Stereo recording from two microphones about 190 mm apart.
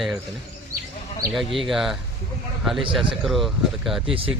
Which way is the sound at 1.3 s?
Centre (ahead or behind).